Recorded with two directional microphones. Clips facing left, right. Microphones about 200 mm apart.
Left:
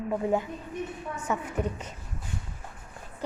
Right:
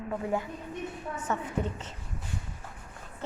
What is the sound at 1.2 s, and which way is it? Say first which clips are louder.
Speech: left 2 dB; 15° left (ahead or behind).